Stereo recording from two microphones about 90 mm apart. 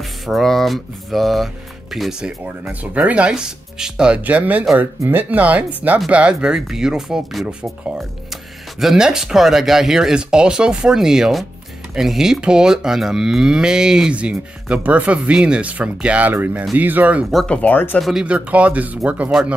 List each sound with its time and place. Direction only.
0.0 s speech: centre (ahead or behind); by 17.3 s 20° right (ahead or behind)
17.5 s speech: 15° left (ahead or behind)
18.2 s speech: 15° right (ahead or behind)